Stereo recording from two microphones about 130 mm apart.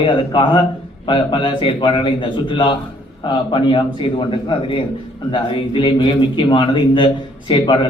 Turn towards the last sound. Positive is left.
turn(degrees=35)  # may be behind; listen again after turning